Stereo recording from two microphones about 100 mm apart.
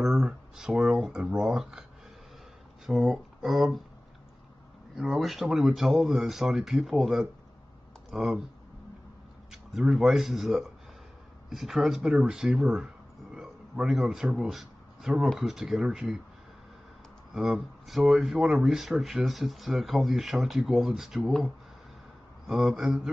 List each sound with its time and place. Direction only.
0.0 s speech: 5° right (ahead or behind)
2.9 s speech: centre (ahead or behind)
4.9 s speech: centre (ahead or behind)
9.5 s speech: 5° right (ahead or behind)
13.3 s a sound: 5° right (ahead or behind)
15.2 s speech: centre (ahead or behind)
17.3 s speech: centre (ahead or behind)
22.5 s speech: 5° right (ahead or behind)